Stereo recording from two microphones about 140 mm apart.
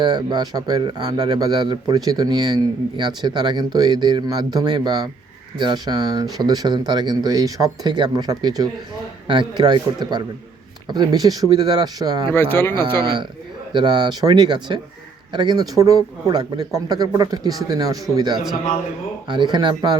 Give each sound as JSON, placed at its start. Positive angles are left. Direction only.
{"t": 0.0, "sound": "a man's voice", "side_deg": -30}
{"t": 12.3, "sound": "speech", "side_deg": 15}
{"t": 13.0, "sound": "a man's voice", "side_deg": -35}
{"t": 19.3, "sound": "a man's voice", "side_deg": -30}